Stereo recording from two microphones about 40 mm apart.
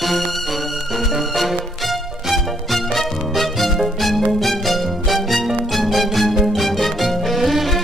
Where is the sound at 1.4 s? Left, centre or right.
Centre.